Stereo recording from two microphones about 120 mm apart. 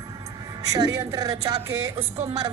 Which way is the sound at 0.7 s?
30° right (ahead or behind).